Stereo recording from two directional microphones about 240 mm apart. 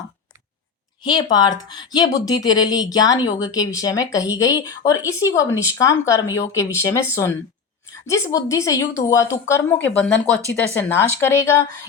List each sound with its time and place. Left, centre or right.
1.0 s speech: centre